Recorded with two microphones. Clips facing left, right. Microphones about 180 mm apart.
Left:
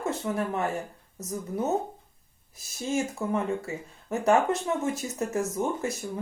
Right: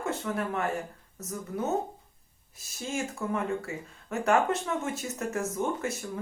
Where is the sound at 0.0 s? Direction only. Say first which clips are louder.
Left 2 dB; 20° left (ahead or behind).